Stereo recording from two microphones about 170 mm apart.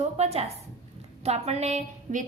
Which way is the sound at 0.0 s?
40° right (ahead or behind).